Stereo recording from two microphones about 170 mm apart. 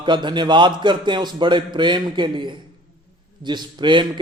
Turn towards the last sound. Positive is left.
turn(degrees=-25)  # may be behind; listen again after turning